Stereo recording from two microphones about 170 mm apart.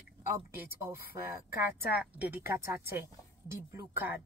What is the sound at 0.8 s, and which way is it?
A woman's voice, 15° right (ahead or behind).